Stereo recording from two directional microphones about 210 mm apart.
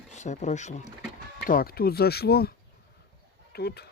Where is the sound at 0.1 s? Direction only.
35° left (ahead or behind).